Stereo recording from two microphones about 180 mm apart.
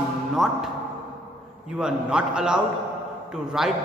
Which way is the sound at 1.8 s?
5° right (ahead or behind).